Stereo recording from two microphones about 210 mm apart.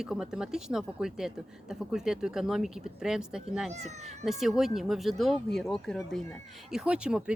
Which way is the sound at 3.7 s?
30° right (ahead or behind).